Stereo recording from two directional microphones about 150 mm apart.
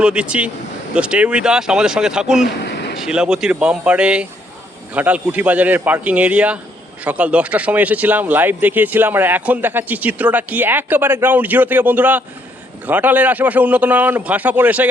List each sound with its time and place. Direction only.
0.0 s speech: 5° right (ahead or behind)
2.6 s a sound: 90° left
3.0 s speech: 5° right (ahead or behind)